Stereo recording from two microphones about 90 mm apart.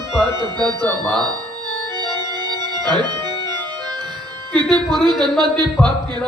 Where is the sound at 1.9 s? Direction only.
55° right (ahead or behind).